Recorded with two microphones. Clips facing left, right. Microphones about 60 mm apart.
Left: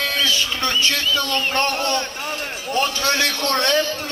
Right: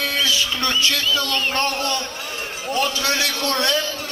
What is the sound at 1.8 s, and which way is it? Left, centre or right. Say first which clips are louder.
A man's voice: left 2 dB; left.